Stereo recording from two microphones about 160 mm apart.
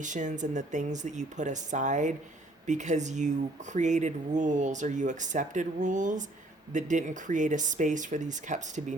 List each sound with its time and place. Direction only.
0.0 s speech: 50° right (ahead or behind)